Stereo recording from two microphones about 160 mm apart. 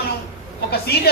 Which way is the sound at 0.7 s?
80° left.